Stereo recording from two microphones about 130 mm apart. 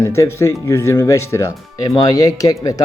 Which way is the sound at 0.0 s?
20° left (ahead or behind).